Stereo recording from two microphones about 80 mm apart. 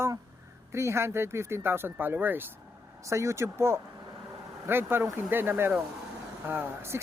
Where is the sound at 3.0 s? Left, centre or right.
Right.